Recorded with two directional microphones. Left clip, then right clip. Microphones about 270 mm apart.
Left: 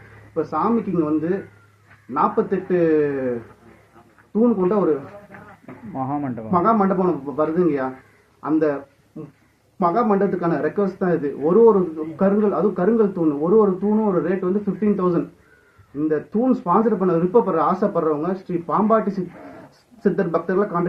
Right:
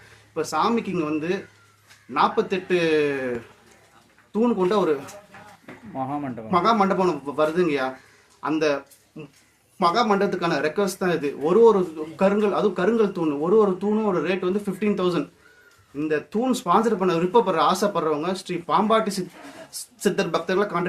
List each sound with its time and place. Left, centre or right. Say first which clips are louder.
0.3 s speech: left 1 dB; right
2.1 s speech: left 1 dB; right
4.3 s speech: left 2 dB; right
5.9 s speech: left 3 dB; centre
6.5 s speech: left 1 dB; right